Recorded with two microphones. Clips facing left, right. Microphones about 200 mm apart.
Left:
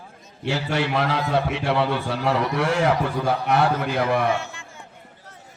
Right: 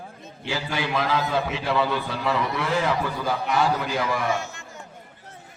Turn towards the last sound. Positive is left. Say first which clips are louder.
# left 3 dB
turn(degrees=-45)  # may be behind; listen again after turning